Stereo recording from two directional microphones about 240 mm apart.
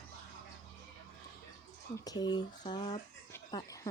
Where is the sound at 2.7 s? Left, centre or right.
Centre.